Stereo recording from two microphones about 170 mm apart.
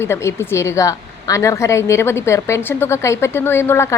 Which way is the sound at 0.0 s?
15° left (ahead or behind).